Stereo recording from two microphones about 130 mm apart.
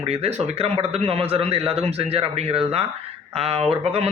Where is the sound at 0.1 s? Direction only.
55° right (ahead or behind).